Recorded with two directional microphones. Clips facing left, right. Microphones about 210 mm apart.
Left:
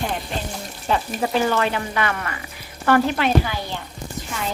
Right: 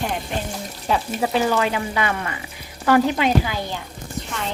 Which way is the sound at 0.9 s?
5° right (ahead or behind).